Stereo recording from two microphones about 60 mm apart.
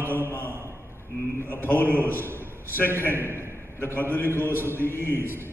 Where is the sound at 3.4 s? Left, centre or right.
Left.